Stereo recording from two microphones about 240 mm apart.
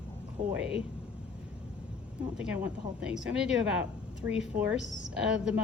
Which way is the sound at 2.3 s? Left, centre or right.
Centre.